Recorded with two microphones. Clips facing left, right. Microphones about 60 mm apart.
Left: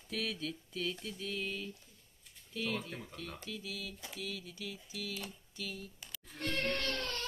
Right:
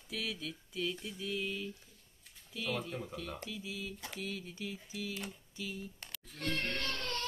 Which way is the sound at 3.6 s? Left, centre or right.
Centre.